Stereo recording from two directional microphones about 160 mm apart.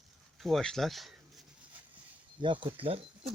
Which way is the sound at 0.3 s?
Centre (ahead or behind).